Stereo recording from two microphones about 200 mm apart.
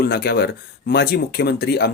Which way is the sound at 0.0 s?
50° left (ahead or behind).